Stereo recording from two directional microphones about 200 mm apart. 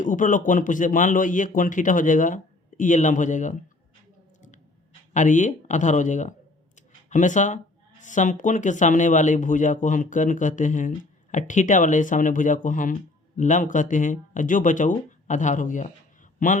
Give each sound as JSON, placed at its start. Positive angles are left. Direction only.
{"t": 0.0, "sound": "speech", "side_deg": 40}
{"t": 5.1, "sound": "speech", "side_deg": 40}